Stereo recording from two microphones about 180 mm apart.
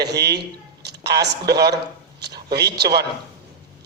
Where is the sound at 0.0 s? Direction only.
65° right (ahead or behind).